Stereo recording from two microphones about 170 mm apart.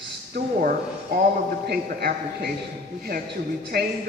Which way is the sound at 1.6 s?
70° right (ahead or behind).